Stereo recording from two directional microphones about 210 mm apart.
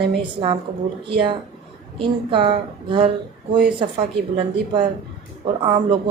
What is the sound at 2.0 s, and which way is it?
Speech, 25° right (ahead or behind).